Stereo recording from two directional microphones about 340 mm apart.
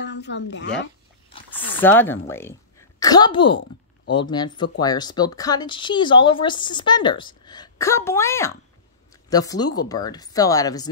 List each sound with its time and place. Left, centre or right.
0.0 s speech: left
1.5 s speech: centre